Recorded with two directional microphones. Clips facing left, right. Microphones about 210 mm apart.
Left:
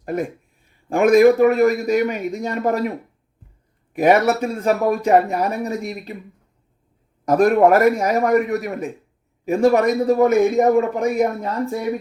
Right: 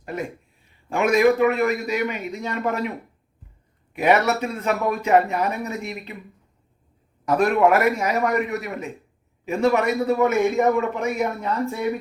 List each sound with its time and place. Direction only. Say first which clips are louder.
0.0 s speech: left 6 dB; 45° left (ahead or behind)
3.9 s speech: left 4 dB; 50° left (ahead or behind)
7.3 s a man's voice: left 4 dB; 45° left (ahead or behind)